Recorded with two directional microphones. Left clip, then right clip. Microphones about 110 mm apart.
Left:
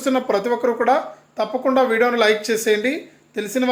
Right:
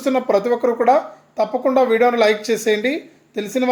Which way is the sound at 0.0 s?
20° right (ahead or behind).